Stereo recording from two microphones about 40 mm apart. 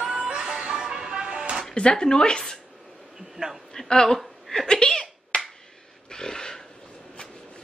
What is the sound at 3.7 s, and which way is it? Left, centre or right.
A woman's voice, centre.